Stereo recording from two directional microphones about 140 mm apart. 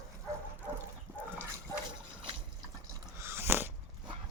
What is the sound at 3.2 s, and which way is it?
Biting, 15° right (ahead or behind).